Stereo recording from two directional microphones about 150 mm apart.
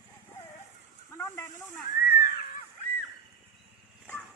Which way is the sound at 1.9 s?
75° left (ahead or behind).